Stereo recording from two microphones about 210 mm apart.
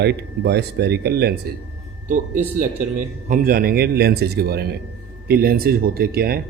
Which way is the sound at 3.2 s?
40° right (ahead or behind).